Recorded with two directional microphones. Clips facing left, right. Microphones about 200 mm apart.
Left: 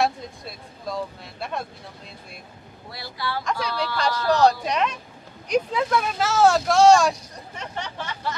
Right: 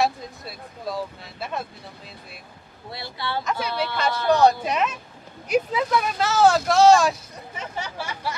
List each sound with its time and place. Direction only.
0.0 s speech: centre (ahead or behind)
2.9 s speech: 25° right (ahead or behind)
3.4 s speech: 5° right (ahead or behind)